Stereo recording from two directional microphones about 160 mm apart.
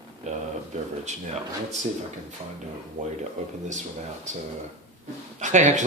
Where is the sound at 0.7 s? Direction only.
50° right (ahead or behind).